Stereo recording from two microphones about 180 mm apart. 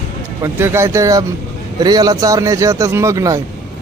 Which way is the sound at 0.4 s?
15° right (ahead or behind).